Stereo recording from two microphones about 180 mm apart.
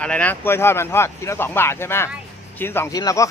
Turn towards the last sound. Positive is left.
turn(degrees=20)  # may be behind; listen again after turning